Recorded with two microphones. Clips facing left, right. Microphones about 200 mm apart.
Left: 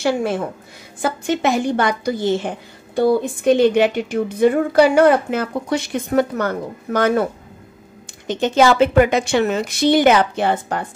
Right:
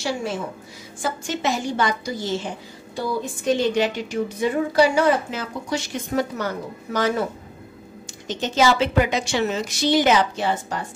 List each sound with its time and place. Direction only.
0.0 s a woman's voice: 55° left (ahead or behind)
8.3 s a woman's voice: 55° left (ahead or behind)